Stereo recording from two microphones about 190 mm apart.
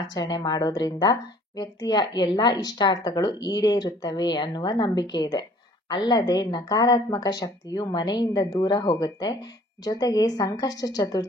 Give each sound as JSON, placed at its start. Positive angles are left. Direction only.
{"t": 0.1, "sound": "a woman's voice", "side_deg": 20}